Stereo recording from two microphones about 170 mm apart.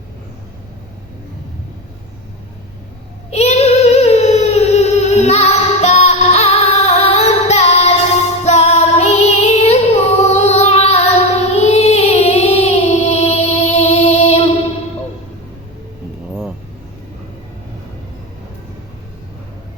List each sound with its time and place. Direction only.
3.2 s child singing: 40° left (ahead or behind)
8.4 s music: 40° left (ahead or behind)